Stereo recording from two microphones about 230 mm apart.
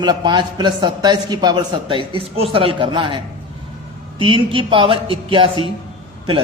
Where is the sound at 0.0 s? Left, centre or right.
Centre.